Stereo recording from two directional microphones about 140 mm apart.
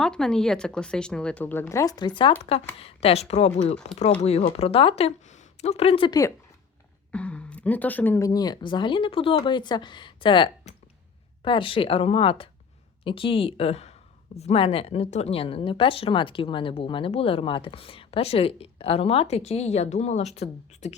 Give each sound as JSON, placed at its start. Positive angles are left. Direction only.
{"t": 0.0, "sound": "speech", "side_deg": 5}
{"t": 2.7, "sound": "speech", "side_deg": 45}
{"t": 6.1, "sound": "speech", "side_deg": 25}
{"t": 7.1, "sound": "speech", "side_deg": 10}